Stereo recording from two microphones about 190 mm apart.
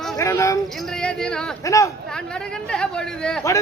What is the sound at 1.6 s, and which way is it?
Speech, 15° left (ahead or behind).